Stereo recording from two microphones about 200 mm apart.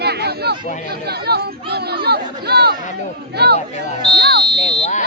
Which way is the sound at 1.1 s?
55° right (ahead or behind).